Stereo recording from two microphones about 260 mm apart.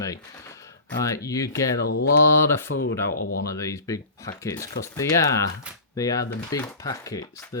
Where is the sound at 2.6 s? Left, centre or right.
Left.